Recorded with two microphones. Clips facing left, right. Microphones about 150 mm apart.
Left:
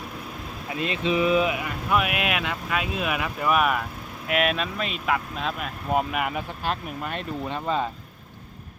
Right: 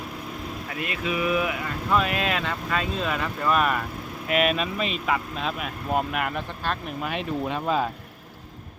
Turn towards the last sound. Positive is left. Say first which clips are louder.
# right 2 dB
turn(degrees=-5)  # may be behind; listen again after turning